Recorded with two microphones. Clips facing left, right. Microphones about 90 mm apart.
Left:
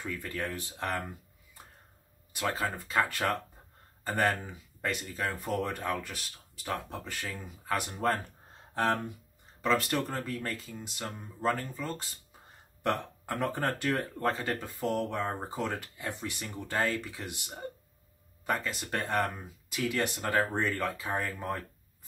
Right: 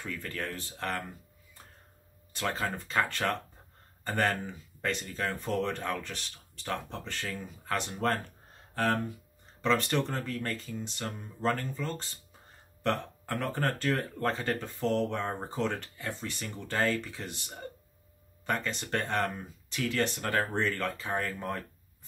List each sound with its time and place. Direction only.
0.0 s speech: 10° left (ahead or behind)
2.3 s speech: 5° left (ahead or behind)
8.7 s speech: 20° left (ahead or behind)
9.6 s speech: 5° left (ahead or behind)
14.2 s speech: 5° left (ahead or behind)